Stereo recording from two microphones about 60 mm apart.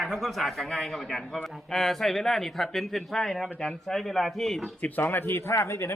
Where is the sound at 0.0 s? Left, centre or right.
Centre.